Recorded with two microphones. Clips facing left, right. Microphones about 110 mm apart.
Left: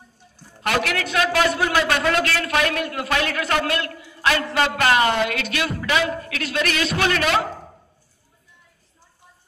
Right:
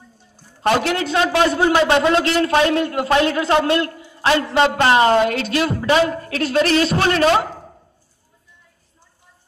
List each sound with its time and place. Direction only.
0.6 s a man's voice: 30° right (ahead or behind)